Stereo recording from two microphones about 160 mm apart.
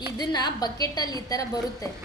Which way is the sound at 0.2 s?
25° left (ahead or behind).